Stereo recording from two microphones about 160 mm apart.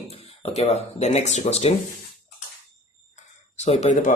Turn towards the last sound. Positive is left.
turn(degrees=50)  # may be behind; listen again after turning